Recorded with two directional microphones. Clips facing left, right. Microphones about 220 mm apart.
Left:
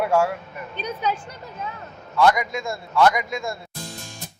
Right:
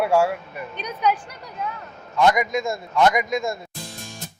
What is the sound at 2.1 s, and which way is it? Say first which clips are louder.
A man's voice: even; 20° right (ahead or behind).